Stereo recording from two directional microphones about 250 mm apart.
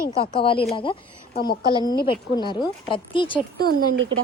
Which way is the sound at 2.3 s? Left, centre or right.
Centre.